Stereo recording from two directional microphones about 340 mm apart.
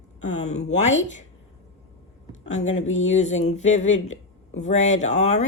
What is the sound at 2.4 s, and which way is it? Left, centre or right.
Speech, centre.